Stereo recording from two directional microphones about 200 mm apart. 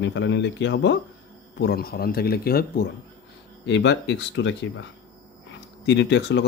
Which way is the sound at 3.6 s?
60° left (ahead or behind).